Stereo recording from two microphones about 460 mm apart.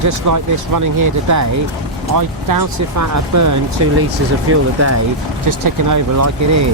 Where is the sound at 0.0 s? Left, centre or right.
Right.